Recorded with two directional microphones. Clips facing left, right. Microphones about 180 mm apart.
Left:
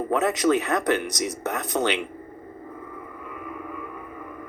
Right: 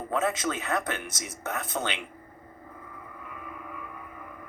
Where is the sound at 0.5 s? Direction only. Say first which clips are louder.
Left 8 dB; 75° left (ahead or behind).